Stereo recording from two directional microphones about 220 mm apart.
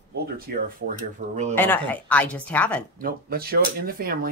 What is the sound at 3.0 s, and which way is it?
Speech, 45° right (ahead or behind).